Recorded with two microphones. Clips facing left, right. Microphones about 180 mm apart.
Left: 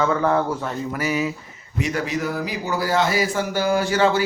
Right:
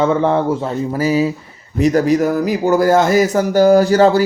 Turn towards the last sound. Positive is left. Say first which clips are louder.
# right 9 dB
turn(degrees=-40)  # may be behind; listen again after turning